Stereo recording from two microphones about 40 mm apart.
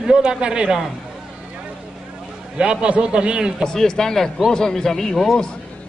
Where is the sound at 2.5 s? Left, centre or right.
Right.